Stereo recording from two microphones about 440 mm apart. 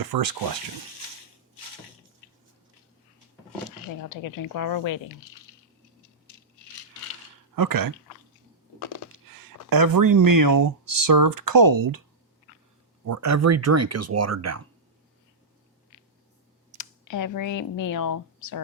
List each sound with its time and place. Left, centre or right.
0.1 s speech: right
4.1 s speech: left
7.5 s speech: right
9.3 s speech: right
13.1 s speech: right
16.7 s speech: left